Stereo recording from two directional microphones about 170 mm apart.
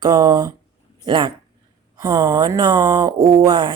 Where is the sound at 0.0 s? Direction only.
25° right (ahead or behind).